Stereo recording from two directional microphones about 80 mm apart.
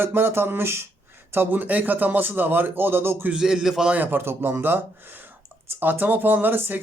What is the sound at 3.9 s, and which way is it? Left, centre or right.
Speech, right.